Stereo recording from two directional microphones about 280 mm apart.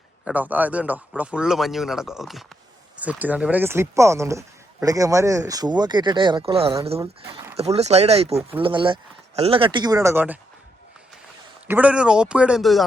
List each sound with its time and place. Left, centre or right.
0.3 s speech: centre; by 8.4 s right
8.4 s speech: centre
8.6 s speech: centre
11.7 s speech: centre